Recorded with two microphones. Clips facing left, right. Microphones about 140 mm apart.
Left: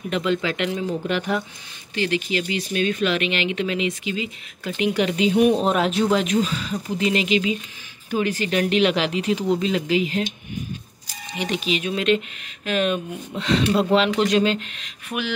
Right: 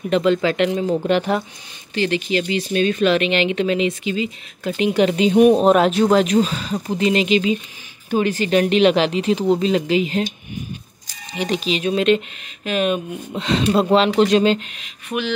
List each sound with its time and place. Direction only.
0.1 s speech: 35° right (ahead or behind)
5.5 s speech: 55° right (ahead or behind)
5.9 s speech: 40° right (ahead or behind)
11.3 s speech: 35° right (ahead or behind)
12.6 s speech: 20° right (ahead or behind)
15.0 s a sound: 10° left (ahead or behind)